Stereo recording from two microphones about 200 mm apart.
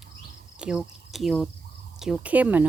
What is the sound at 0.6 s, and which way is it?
Speech, 5° right (ahead or behind).